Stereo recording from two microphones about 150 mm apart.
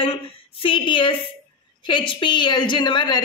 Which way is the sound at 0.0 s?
35° left (ahead or behind).